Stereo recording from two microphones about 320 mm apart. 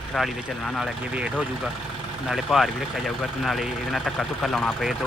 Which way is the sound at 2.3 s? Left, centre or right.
Centre.